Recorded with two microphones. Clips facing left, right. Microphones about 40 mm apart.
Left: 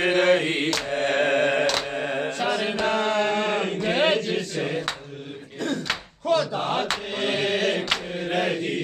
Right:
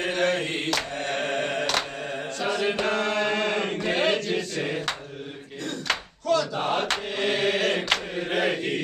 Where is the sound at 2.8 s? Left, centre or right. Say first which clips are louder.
Left 2 dB; centre.